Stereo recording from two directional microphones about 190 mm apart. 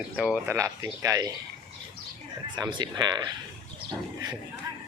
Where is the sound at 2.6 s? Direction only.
25° right (ahead or behind).